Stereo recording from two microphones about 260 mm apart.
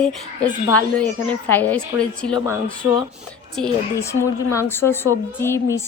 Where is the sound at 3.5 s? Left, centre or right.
Centre.